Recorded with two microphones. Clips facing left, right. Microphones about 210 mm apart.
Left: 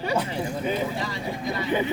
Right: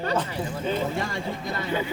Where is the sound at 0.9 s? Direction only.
50° right (ahead or behind).